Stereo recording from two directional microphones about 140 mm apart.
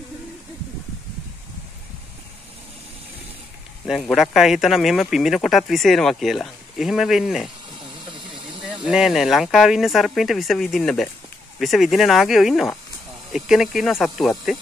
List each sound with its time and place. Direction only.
3.8 s speech: centre (ahead or behind)
8.1 s engine: 35° right (ahead or behind)
8.8 s speech: centre (ahead or behind)